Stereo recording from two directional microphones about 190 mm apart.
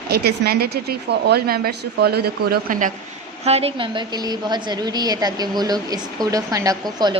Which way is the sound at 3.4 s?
30° right (ahead or behind).